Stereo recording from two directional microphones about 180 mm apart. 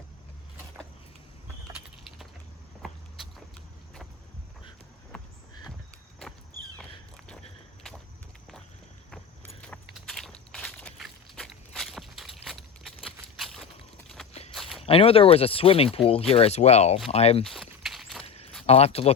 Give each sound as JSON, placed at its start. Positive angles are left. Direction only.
{"t": 2.8, "sound": "vehicle", "side_deg": 0}
{"t": 5.1, "sound": "a sound", "side_deg": 5}
{"t": 9.9, "sound": "walk", "side_deg": 0}
{"t": 12.5, "sound": "a sound", "side_deg": 0}
{"t": 14.5, "sound": "walk", "side_deg": 0}
{"t": 14.8, "sound": "speech", "side_deg": 30}
{"t": 17.4, "sound": "walk", "side_deg": 0}
{"t": 18.2, "sound": "a sound", "side_deg": 35}
{"t": 18.6, "sound": "speech", "side_deg": 35}